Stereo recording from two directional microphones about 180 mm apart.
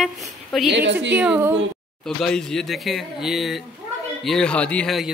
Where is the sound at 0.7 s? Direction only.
75° right (ahead or behind).